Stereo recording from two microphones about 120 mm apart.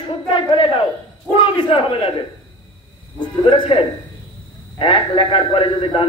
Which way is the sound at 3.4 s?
45° left (ahead or behind).